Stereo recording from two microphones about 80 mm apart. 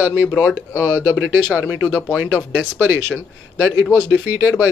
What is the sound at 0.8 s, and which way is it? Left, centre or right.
Speech, left.